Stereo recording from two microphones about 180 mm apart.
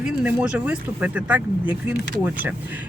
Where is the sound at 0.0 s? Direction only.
5° right (ahead or behind).